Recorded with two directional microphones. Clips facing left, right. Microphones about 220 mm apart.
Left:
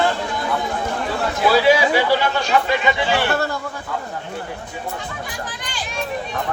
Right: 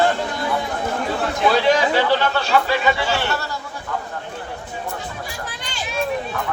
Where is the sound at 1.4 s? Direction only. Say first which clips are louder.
Left 2 dB; 5° left (ahead or behind).